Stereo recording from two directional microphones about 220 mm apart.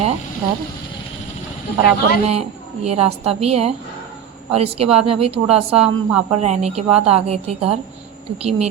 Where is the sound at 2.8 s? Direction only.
25° right (ahead or behind).